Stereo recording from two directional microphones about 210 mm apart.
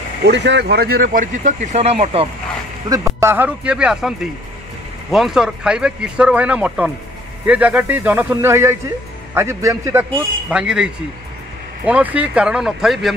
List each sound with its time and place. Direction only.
0.2 s speech: 55° right (ahead or behind); by 2.2 s 30° right (ahead or behind)
2.9 s speech: 15° right (ahead or behind)
5.1 s speech: centre (ahead or behind)